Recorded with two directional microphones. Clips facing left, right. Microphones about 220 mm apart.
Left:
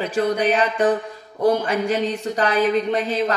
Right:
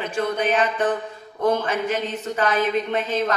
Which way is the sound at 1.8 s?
35° left (ahead or behind).